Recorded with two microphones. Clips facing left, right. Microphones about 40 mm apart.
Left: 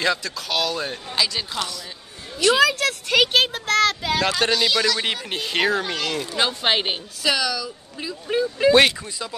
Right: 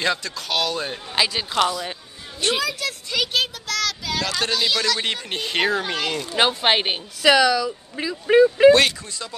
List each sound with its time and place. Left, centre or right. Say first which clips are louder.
0.0 s speech: left 1 dB; centre
1.1 s speech: right 2 dB; right
2.4 s speech: left 6 dB; left
4.0 s speech: left 4 dB; left
4.5 s a woman's voice: left 2 dB; centre
7.3 s speech: right 7 dB; right
8.0 s speech: right 8 dB; right
8.7 s speech: left 2 dB; centre